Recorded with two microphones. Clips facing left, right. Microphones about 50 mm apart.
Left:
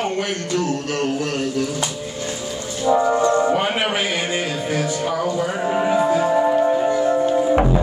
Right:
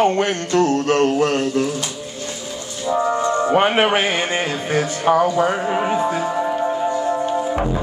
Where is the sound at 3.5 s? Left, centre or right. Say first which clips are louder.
Right 5 dB; right.